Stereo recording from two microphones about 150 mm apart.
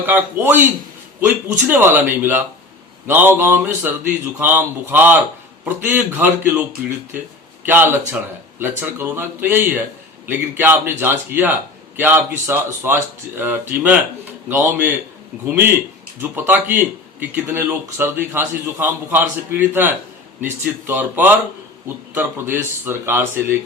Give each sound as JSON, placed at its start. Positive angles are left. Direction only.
{"t": 0.0, "sound": "a man's voice", "side_deg": -15}